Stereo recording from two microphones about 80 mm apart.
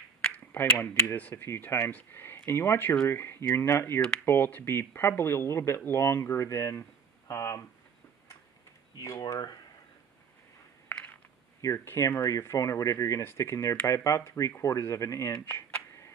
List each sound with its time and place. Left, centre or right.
0.5 s speech: left
4.0 s speech: centre
4.3 s speech: left
7.2 s a sound: left
8.9 s speech: left
11.6 s speech: left